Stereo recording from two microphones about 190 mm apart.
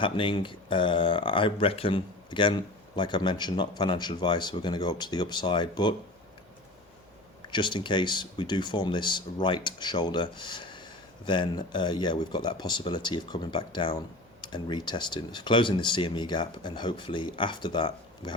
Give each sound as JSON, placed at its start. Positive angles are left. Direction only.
{"t": 0.0, "sound": "speech", "side_deg": 25}
{"t": 7.5, "sound": "speech", "side_deg": 25}